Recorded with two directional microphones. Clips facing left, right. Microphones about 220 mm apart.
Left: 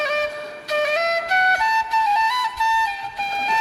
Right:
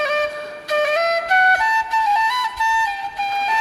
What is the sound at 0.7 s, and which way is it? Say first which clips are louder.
Flute: right 3 dB; 50° right (ahead or behind).